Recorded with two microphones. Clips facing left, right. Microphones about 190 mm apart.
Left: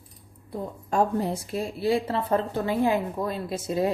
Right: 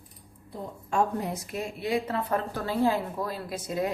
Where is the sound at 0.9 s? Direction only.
35° left (ahead or behind).